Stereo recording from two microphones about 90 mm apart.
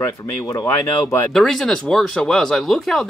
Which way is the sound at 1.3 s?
5° left (ahead or behind).